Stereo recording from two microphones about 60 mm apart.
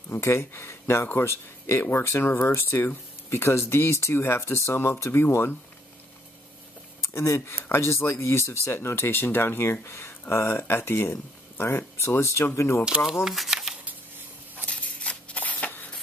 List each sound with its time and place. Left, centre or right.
0.1 s speech: left
7.2 s speech: left
12.8 s speech: centre
13.1 s speech: centre
14.7 s a sound: left